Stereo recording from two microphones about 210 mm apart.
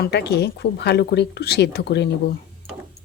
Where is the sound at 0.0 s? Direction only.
50° left (ahead or behind).